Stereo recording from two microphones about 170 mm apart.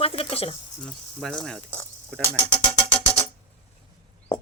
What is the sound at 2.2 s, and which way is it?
Music, 30° left (ahead or behind).